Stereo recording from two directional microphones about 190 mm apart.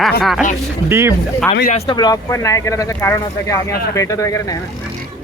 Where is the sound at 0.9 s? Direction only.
15° right (ahead or behind).